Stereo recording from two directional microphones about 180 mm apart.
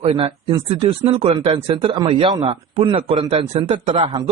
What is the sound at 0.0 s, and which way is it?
Speech, 35° right (ahead or behind).